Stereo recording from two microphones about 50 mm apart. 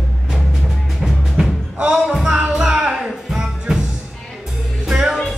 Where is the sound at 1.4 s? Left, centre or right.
Centre.